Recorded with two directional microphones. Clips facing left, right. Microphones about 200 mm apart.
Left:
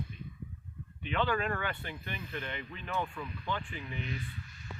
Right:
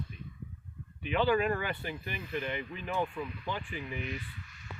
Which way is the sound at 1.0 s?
10° right (ahead or behind).